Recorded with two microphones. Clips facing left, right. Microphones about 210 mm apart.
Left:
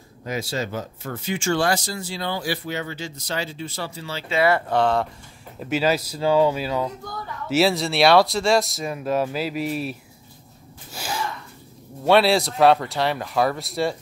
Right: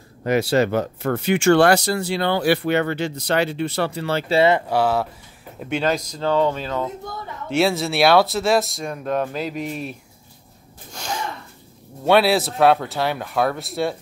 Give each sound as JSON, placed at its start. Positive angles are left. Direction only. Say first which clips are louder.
{"t": 0.2, "sound": "speech", "louder": "right 9 dB", "side_deg": -65}
{"t": 4.3, "sound": "speech", "louder": "right 3 dB", "side_deg": -25}
{"t": 4.6, "sound": "speech", "louder": "right 1 dB", "side_deg": -5}
{"t": 5.6, "sound": "speech", "louder": "even", "side_deg": 5}
{"t": 6.9, "sound": "speech", "louder": "right 2 dB", "side_deg": -25}
{"t": 7.4, "sound": "speech", "louder": "even", "side_deg": 0}
{"t": 10.9, "sound": "gasp", "louder": "even", "side_deg": 5}
{"t": 12.1, "sound": "speech", "louder": "right 1 dB", "side_deg": 0}